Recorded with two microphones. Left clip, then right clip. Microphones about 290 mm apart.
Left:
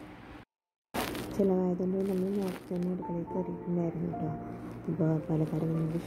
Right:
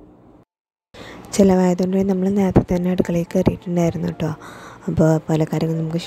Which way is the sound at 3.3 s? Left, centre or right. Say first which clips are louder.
Right 18 dB; right.